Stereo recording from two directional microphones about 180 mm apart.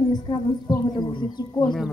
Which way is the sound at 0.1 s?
20° left (ahead or behind).